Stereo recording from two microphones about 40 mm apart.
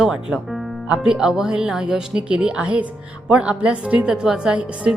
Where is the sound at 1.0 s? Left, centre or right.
Centre.